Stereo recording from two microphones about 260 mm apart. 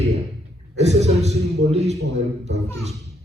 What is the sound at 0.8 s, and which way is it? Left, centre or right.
A man's voice, right.